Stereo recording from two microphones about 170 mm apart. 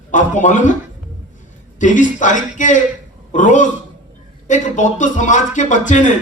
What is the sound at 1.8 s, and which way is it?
A man's voice, 50° left (ahead or behind).